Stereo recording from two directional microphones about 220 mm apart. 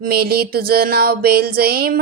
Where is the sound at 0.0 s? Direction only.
45° right (ahead or behind).